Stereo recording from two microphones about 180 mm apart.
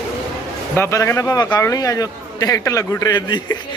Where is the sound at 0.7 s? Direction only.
15° left (ahead or behind).